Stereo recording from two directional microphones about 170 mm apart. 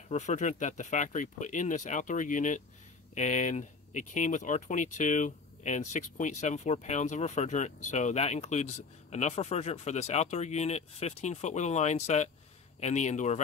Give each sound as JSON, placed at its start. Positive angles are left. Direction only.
{"t": 0.1, "sound": "speech", "side_deg": 45}